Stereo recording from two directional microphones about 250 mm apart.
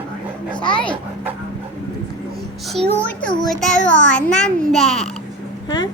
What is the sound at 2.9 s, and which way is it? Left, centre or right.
Speech, centre.